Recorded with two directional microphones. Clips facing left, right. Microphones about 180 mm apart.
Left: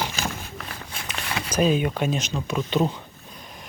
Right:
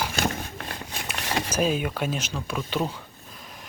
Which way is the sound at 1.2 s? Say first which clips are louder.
Right 3 dB; 40° right (ahead or behind).